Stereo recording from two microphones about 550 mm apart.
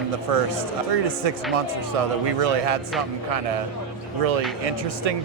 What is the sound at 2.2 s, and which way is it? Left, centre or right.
Speech, right.